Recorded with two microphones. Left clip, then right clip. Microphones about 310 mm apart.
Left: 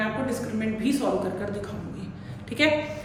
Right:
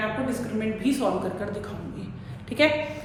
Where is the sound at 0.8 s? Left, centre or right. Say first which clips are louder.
Even; centre.